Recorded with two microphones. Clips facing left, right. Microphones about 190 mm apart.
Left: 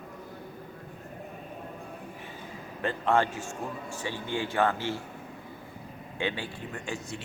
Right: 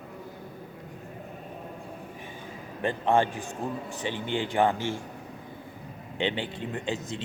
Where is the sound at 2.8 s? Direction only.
15° right (ahead or behind).